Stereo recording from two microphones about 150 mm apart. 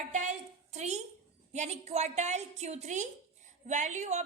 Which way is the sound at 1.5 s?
50° right (ahead or behind).